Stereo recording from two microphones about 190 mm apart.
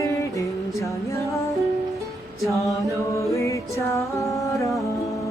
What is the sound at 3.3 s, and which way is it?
Music, 15° left (ahead or behind).